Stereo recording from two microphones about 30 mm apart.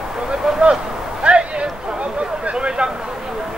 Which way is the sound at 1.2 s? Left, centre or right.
Right.